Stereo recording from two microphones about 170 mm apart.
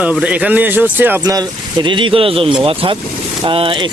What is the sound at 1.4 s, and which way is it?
Speech, 25° right (ahead or behind).